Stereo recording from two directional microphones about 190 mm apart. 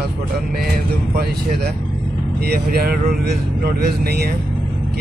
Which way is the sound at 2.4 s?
55° right (ahead or behind).